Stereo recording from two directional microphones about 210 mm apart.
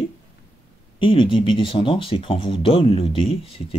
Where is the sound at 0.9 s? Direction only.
25° left (ahead or behind).